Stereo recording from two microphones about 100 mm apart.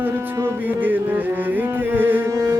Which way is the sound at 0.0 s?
20° right (ahead or behind).